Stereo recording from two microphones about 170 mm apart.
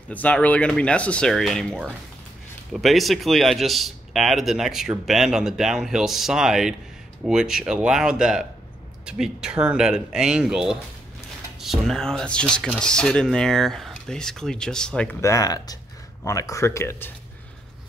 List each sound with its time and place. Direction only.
0.1 s speech: 10° left (ahead or behind)
15.1 s speech: 20° left (ahead or behind)